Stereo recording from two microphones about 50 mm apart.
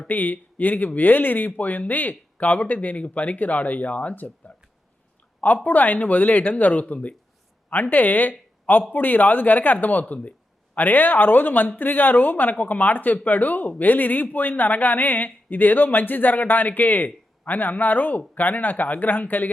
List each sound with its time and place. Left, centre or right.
0.1 s speech: left
5.6 s speech: left